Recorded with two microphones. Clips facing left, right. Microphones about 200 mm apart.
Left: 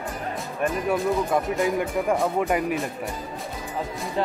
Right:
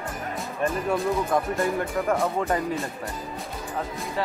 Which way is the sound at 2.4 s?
15° left (ahead or behind).